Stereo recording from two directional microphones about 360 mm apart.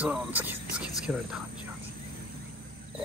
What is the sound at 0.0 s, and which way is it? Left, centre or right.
Speech, centre.